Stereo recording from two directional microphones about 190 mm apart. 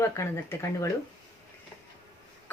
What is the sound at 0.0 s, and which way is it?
Speech, 15° left (ahead or behind).